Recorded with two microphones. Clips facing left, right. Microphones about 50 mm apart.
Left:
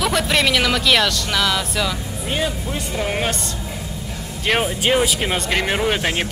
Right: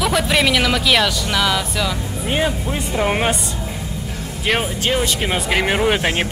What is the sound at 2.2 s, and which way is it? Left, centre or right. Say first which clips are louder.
Speech: right 3 dB; centre.